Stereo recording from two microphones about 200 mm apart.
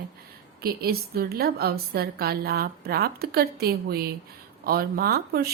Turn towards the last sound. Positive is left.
turn(degrees=-50)  # may be behind; listen again after turning